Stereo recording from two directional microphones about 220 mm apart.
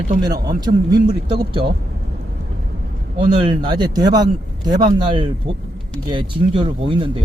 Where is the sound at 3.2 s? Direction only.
25° right (ahead or behind).